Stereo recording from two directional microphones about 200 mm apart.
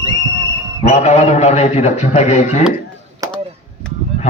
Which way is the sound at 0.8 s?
35° left (ahead or behind).